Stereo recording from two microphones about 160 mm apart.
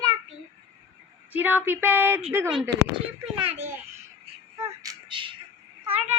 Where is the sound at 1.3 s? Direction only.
10° right (ahead or behind).